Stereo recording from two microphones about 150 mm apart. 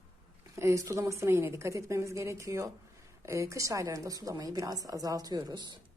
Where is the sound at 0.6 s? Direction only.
20° right (ahead or behind).